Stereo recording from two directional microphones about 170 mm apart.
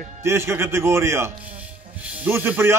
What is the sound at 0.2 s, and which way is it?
Speech, 15° right (ahead or behind).